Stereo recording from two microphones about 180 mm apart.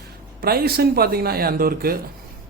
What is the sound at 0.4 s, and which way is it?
Speech, 60° right (ahead or behind).